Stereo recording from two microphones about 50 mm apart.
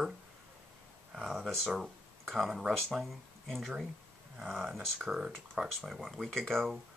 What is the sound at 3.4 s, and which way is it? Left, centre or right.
Speech, centre.